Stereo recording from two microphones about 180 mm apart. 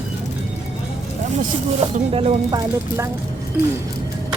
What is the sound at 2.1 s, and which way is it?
Speech, 25° right (ahead or behind).